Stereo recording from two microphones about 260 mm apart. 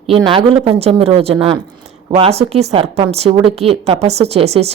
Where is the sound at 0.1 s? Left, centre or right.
Centre.